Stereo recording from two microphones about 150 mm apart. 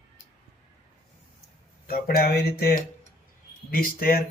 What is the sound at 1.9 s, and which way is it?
Speech, 80° left.